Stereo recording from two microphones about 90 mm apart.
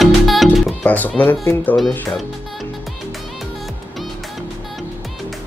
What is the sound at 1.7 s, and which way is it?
Music, centre (ahead or behind).